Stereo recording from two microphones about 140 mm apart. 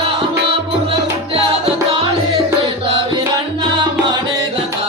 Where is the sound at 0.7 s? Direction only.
40° right (ahead or behind).